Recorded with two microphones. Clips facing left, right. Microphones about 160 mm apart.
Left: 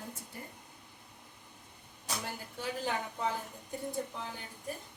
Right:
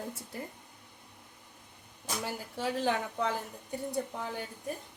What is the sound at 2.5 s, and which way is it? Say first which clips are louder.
Speech: right 5 dB; 90° right.